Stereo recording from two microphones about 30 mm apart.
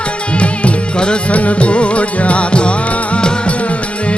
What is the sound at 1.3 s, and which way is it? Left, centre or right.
Music, left.